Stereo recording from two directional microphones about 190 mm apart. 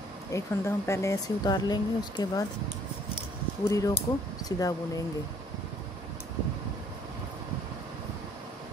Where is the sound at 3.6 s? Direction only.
15° left (ahead or behind).